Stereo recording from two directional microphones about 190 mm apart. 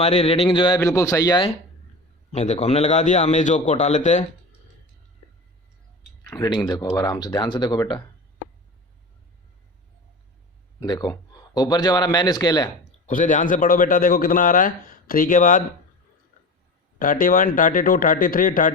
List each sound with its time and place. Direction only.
0.0 s a man's voice: 35° left (ahead or behind)
2.3 s a man's voice: 35° left (ahead or behind)
6.3 s a man's voice: 20° left (ahead or behind)
10.8 s a man's voice: 20° left (ahead or behind)
12.8 s a man's voice: 45° left (ahead or behind)
17.0 s a man's voice: 45° left (ahead or behind)